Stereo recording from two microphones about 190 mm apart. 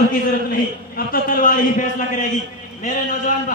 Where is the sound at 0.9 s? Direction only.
50° left (ahead or behind).